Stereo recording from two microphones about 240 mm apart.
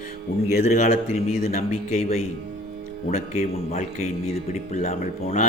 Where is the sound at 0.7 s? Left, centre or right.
Left.